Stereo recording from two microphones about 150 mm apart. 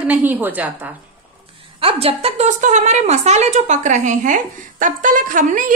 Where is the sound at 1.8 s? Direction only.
40° right (ahead or behind).